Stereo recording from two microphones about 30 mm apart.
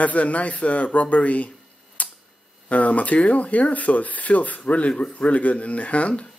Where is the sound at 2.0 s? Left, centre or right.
Left.